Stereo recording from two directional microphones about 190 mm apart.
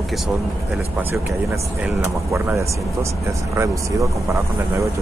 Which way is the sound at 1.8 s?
15° right (ahead or behind).